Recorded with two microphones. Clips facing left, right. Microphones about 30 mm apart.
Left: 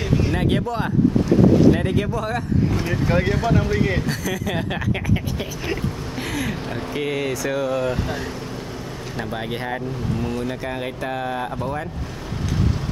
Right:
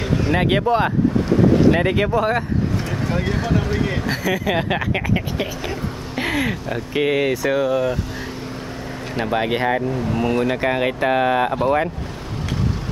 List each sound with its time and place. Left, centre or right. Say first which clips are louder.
0.3 s speech: right 5 dB; right
2.8 s speech: left 2 dB; centre
3.4 s speech: left 1 dB; centre
4.1 s speech: right 4 dB; right
7.5 s speech: right 2 dB; centre
9.1 s speech: right 8 dB; right
10.1 s speech: right 7 dB; right
10.5 s speech: right 8 dB; right